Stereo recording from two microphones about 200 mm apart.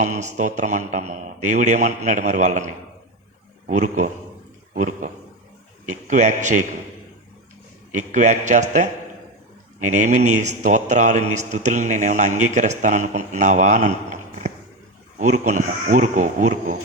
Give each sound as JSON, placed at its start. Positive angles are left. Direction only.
{"t": 0.0, "sound": "a man's voice", "side_deg": -35}
{"t": 3.7, "sound": "a man's voice", "side_deg": -40}
{"t": 4.7, "sound": "a sound", "side_deg": -40}
{"t": 5.8, "sound": "a man's voice", "side_deg": -40}
{"t": 7.9, "sound": "a man's voice", "side_deg": -35}